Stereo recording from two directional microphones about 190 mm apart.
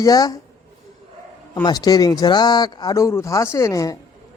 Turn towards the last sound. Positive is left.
turn(degrees=20)  # may be behind; listen again after turning